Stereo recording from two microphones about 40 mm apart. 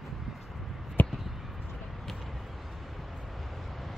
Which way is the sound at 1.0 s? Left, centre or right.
Left.